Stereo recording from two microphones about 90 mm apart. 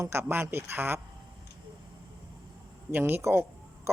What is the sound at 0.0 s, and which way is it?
Speech, 30° right (ahead or behind).